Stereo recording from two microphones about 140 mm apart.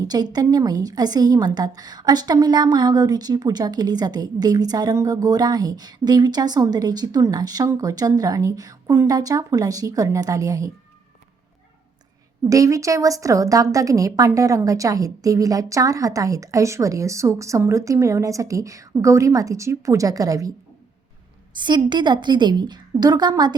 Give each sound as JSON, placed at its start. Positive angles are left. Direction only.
{"t": 0.0, "sound": "a woman's voice", "side_deg": -30}
{"t": 12.5, "sound": "a woman's voice", "side_deg": -25}
{"t": 21.6, "sound": "a woman's voice", "side_deg": -30}